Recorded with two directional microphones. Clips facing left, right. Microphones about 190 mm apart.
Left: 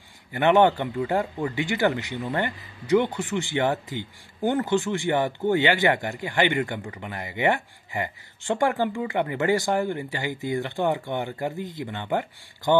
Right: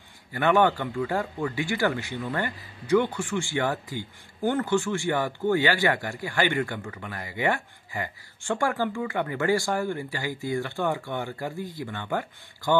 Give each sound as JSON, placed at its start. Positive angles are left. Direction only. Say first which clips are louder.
{"t": 0.3, "sound": "speech", "louder": "left 3 dB", "side_deg": 20}